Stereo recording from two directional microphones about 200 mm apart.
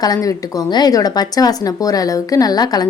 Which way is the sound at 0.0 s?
20° left (ahead or behind).